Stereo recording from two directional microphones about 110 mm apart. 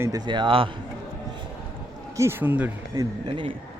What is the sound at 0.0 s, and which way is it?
Speech, 35° right (ahead or behind).